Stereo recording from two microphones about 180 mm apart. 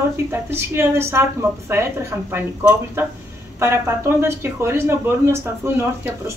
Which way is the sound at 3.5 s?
15° right (ahead or behind).